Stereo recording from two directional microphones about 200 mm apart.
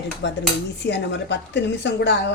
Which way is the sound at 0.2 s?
65° left (ahead or behind).